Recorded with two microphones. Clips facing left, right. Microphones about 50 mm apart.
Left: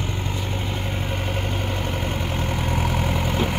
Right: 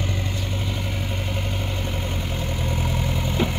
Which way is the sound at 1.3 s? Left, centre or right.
Left.